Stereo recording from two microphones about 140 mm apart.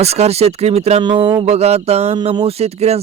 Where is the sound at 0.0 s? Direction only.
50° right (ahead or behind).